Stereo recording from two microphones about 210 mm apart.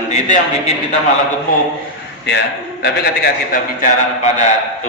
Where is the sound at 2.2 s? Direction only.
55° left (ahead or behind).